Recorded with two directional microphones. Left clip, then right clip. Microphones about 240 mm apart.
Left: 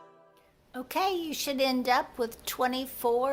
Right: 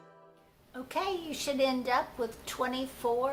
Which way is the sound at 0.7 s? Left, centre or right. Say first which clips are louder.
Left 4 dB; left.